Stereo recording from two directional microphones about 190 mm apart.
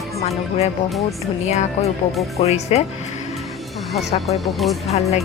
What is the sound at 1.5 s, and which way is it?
A woman's voice, 35° left (ahead or behind).